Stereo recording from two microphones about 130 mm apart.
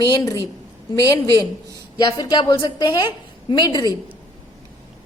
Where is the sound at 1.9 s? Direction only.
30° left (ahead or behind).